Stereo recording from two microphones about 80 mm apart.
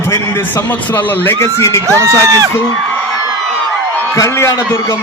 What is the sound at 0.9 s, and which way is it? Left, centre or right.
Speech, left.